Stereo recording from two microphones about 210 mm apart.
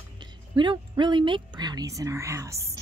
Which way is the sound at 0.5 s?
20° right (ahead or behind).